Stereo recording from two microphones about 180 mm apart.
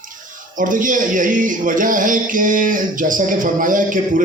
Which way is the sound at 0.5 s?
45° right (ahead or behind).